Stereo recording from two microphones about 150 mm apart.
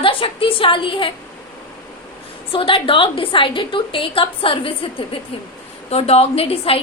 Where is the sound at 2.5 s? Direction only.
35° left (ahead or behind).